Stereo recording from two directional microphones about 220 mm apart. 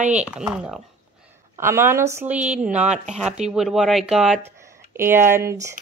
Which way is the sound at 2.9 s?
30° right (ahead or behind).